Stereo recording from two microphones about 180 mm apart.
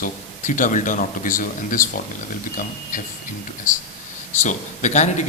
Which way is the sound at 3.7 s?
45° left (ahead or behind).